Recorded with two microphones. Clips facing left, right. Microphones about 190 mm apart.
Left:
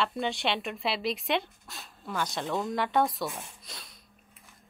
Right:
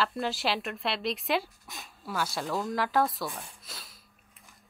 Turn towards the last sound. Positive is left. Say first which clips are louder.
# even
turn(degrees=0)  # may be behind; listen again after turning